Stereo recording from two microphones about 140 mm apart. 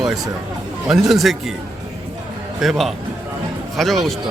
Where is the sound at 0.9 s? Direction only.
Centre (ahead or behind).